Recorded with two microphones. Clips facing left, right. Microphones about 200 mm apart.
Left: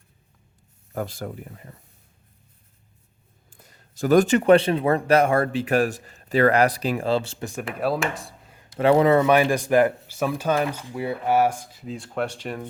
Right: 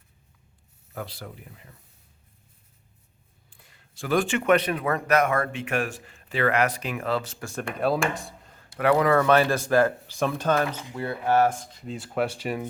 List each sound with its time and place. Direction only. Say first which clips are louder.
0.9 s speech: left 7 dB; 45° left (ahead or behind)
3.5 s speech: left 6 dB; 40° left (ahead or behind); by 7.5 s 25° left (ahead or behind)
7.5 s speech: even; 5° left (ahead or behind)
8.8 s speech: left 4 dB; 25° left (ahead or behind)
9.2 s speech: left 2 dB; 15° left (ahead or behind); by 12.6 s 5° right (ahead or behind)